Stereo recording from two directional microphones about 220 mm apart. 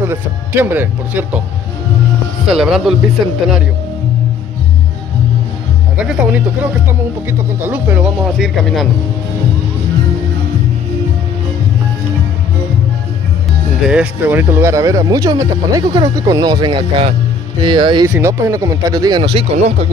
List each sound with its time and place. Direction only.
0.0 s speech: 10° right (ahead or behind)
2.4 s speech: centre (ahead or behind)
5.9 s speech: 5° right (ahead or behind)
13.8 s speech: 5° right (ahead or behind); by 19.9 s 25° right (ahead or behind)